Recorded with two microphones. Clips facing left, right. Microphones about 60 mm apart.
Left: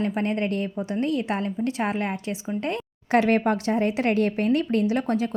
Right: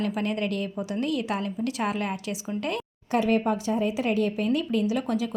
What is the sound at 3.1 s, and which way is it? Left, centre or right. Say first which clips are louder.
Speech: left 3 dB; left.